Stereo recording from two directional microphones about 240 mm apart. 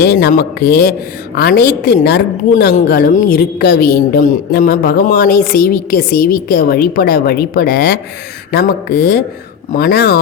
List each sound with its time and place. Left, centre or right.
0.0 s a woman's voice: left